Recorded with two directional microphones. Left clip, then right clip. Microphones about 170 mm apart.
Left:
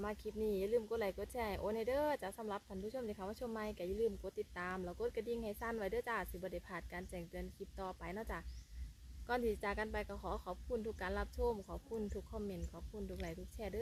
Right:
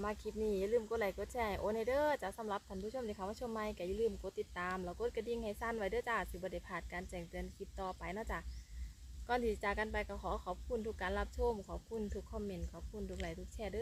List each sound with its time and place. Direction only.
0.0 s speech: centre (ahead or behind)